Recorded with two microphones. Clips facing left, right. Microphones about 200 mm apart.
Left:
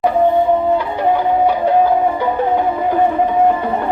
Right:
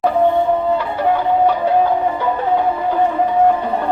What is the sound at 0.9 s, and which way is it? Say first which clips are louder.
Music: left 1 dB; 15° left (ahead or behind).